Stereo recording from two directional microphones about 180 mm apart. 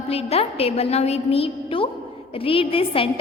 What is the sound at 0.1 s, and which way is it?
A woman's voice, 35° left (ahead or behind).